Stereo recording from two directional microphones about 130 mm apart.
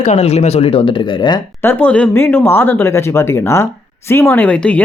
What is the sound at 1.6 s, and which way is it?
Speech, 15° left (ahead or behind).